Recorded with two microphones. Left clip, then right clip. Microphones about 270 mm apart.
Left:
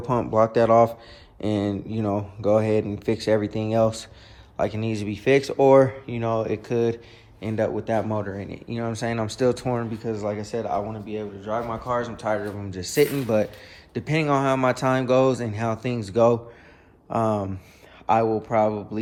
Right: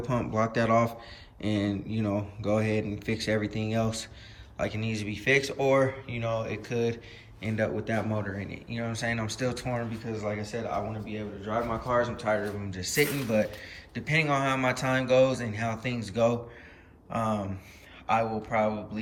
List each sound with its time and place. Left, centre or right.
0.0 s a man's voice: centre